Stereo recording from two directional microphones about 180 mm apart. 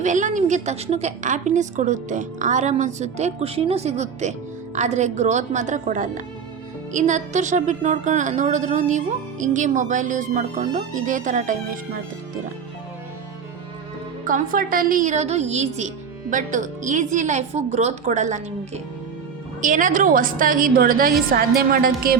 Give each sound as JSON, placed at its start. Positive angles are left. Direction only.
{"t": 0.0, "sound": "a woman's voice", "side_deg": -45}
{"t": 14.3, "sound": "a woman's voice", "side_deg": -50}